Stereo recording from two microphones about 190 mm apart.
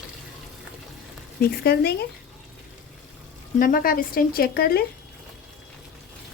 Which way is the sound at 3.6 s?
45° left (ahead or behind).